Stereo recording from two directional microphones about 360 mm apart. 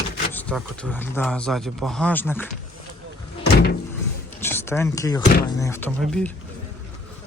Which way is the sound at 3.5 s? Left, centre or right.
Left.